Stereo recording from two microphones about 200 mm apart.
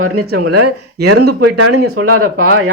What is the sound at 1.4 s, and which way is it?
Speech, 90° right.